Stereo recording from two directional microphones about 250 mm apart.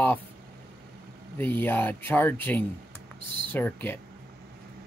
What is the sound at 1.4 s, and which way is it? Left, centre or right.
Speech, centre.